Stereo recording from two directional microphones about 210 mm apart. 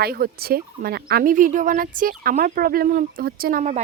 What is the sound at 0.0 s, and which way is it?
Speech, 45° right (ahead or behind).